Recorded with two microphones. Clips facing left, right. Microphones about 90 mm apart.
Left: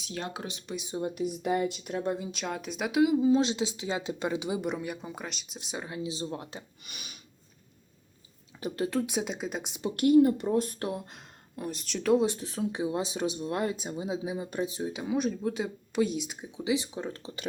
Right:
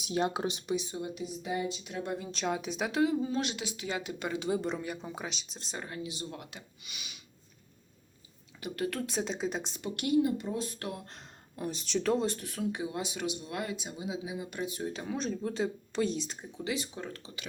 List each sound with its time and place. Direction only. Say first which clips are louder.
0.0 s speech: right 6 dB; 20° right (ahead or behind)
1.0 s speech: left 7 dB; 55° left (ahead or behind)
2.3 s speech: right 2 dB; centre (ahead or behind)
5.5 s speech: left 6 dB; 10° left (ahead or behind)
6.1 s speech: left 6 dB; 30° left (ahead or behind)
6.8 s a sound: left 2 dB; 45° left (ahead or behind)
8.6 s speech: left 4 dB; 25° left (ahead or behind); by 9.7 s 5° left (ahead or behind)
9.8 s speech: left 8 dB; 40° left (ahead or behind)
10.2 s speech: left 5 dB; 60° left (ahead or behind)
11.0 s speech: left 1 dB; 5° left (ahead or behind)
12.1 s speech: left 5 dB; 15° left (ahead or behind)
14.8 s speech: left 5 dB; 10° left (ahead or behind); by 17.4 s 30° left (ahead or behind)